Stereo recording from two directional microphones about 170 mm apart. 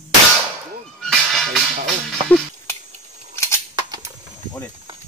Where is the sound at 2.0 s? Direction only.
5° left (ahead or behind).